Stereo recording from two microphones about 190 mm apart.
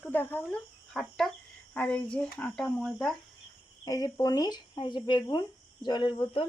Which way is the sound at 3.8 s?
20° left (ahead or behind).